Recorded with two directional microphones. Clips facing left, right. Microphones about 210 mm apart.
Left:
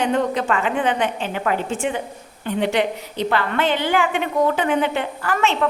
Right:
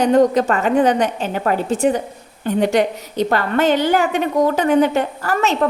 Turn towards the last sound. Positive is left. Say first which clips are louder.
# right 3 dB
turn(degrees=-40)  # may be behind; listen again after turning